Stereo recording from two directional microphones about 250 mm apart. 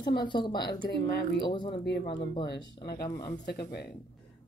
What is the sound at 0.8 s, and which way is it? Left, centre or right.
Speech, left.